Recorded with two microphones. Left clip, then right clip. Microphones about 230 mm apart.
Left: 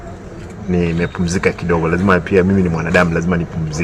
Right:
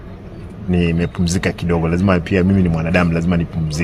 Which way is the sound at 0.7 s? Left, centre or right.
Right.